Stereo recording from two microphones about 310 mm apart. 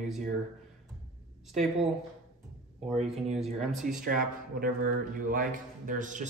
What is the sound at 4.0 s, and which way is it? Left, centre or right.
A man's voice, right.